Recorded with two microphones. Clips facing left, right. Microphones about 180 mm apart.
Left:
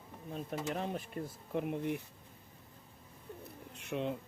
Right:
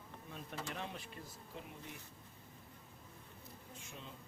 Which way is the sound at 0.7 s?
45° left (ahead or behind).